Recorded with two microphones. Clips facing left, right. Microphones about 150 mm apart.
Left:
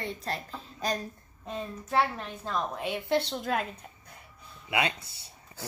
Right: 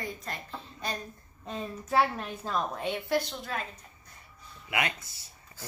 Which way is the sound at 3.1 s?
30° left (ahead or behind).